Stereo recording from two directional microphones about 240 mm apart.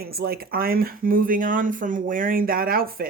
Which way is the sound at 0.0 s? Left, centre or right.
Right.